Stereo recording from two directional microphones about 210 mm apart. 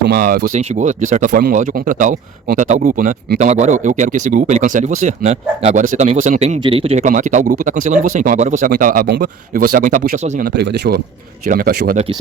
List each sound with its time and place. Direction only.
0.0 s speech: 45° right (ahead or behind)
1.3 s speech: 50° right (ahead or behind)